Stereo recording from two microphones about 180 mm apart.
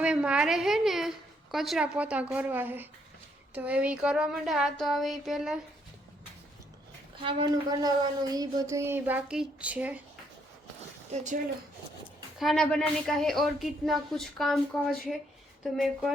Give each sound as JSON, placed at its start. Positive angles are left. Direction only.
{"t": 0.0, "sound": "a woman's voice", "side_deg": -5}
{"t": 7.2, "sound": "a woman's voice", "side_deg": -30}
{"t": 11.1, "sound": "speech", "side_deg": -40}
{"t": 12.4, "sound": "speech", "side_deg": 0}